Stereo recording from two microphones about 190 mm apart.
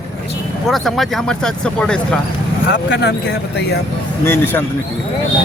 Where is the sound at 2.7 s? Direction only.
60° left (ahead or behind).